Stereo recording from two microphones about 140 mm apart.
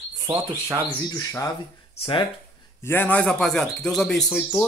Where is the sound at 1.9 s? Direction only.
40° left (ahead or behind).